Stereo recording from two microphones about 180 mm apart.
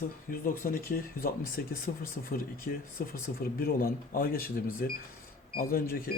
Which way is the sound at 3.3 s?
50° left (ahead or behind).